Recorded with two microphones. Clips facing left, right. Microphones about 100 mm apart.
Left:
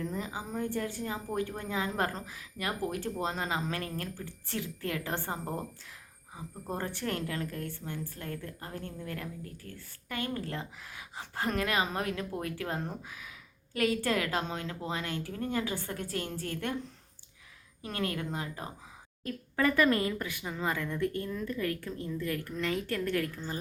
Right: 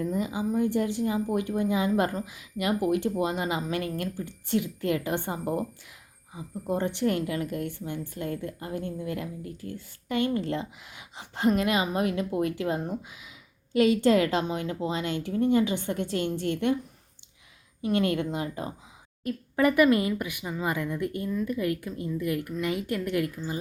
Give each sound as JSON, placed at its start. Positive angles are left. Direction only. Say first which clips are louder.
{"t": 0.1, "sound": "a woman's voice", "louder": "right 9 dB", "side_deg": -15}
{"t": 17.8, "sound": "a woman's voice", "louder": "right 9 dB", "side_deg": -25}